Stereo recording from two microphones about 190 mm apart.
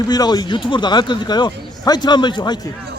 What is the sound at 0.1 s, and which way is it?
Speech, 20° left (ahead or behind).